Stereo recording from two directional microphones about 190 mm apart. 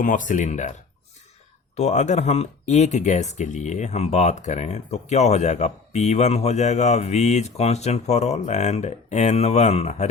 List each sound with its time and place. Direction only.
0.0 s speech: 45° left (ahead or behind)